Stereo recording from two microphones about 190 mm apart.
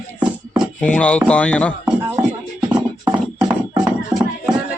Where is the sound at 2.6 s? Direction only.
5° right (ahead or behind).